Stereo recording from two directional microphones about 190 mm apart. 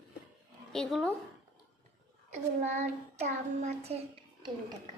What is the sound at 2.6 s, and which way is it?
Child singing, 35° right (ahead or behind).